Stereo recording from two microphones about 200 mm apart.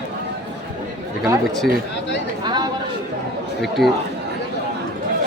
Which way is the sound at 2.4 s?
20° right (ahead or behind).